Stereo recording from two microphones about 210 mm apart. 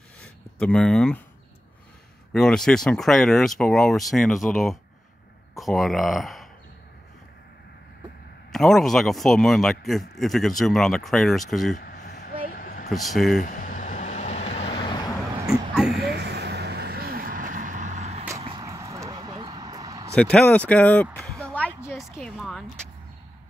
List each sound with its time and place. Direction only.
0.2 s speech: 5° left (ahead or behind)
2.3 s a man's voice: 5° left (ahead or behind)
8.5 s a man's voice: centre (ahead or behind)
11.7 s vehicle: 40° left (ahead or behind)
12.5 s a sound: 45° left (ahead or behind)
12.9 s a man's voice: centre (ahead or behind)
13.4 s vehicle: 40° left (ahead or behind); by 15.1 s 20° left (ahead or behind)
15.7 s a sound: centre (ahead or behind)
16.0 s vehicle: 50° right (ahead or behind); by 18.3 s 35° right (ahead or behind)
18.4 s a sound: 20° right (ahead or behind)
20.2 s speech: 5° left (ahead or behind)
22.4 s vehicle: centre (ahead or behind)